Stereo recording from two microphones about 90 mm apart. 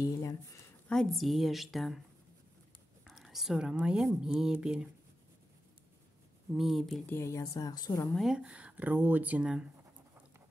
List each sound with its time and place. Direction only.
0.0 s a sound: 40° left (ahead or behind)
0.8 s a woman's voice: 5° left (ahead or behind)
3.1 s whispering: centre (ahead or behind)
3.7 s speech: 10° right (ahead or behind)
6.5 s a woman's voice: 5° right (ahead or behind)
7.1 s speech: 30° left (ahead or behind)
7.5 s a woman's voice: 45° left (ahead or behind)
8.2 s speech: 5° right (ahead or behind)